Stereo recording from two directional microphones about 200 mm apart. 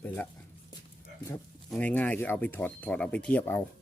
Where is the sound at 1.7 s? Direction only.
5° left (ahead or behind).